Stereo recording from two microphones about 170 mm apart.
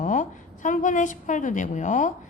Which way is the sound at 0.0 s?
50° left (ahead or behind).